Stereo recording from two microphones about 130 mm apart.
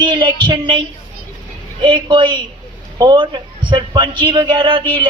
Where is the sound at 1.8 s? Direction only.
40° right (ahead or behind).